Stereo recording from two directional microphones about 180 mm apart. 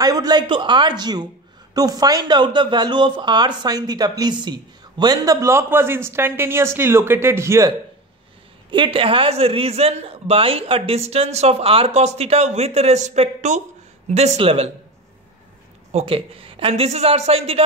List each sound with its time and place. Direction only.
0.0 s a man's voice: 20° right (ahead or behind)
8.6 s a man's voice: 25° right (ahead or behind)
15.9 s a man's voice: 35° right (ahead or behind)